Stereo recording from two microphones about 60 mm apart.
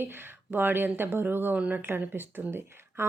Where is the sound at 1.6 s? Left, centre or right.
Right.